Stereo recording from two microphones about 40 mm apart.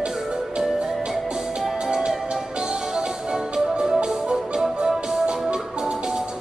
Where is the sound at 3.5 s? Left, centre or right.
Centre.